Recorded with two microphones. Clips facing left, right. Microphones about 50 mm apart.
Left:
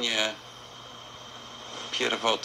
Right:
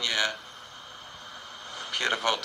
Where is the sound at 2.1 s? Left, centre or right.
Centre.